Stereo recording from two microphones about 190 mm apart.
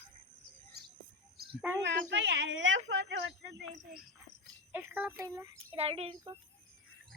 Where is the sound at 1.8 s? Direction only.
70° right (ahead or behind).